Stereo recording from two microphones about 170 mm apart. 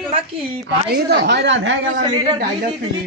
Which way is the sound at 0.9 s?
75° right (ahead or behind).